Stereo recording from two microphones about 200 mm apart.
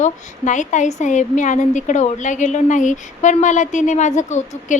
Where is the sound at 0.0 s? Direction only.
35° left (ahead or behind).